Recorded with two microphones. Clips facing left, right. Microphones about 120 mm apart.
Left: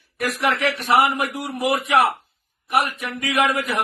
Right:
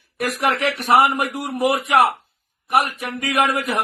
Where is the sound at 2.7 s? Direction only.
45° right (ahead or behind).